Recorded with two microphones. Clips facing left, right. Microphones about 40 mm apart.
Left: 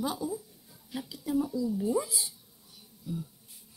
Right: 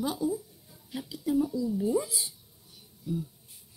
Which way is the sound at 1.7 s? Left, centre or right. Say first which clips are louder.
Right 1 dB; centre.